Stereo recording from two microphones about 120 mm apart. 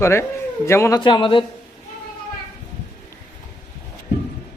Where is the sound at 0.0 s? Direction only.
20° left (ahead or behind).